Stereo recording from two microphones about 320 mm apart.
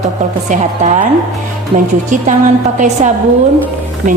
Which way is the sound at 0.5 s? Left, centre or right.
Right.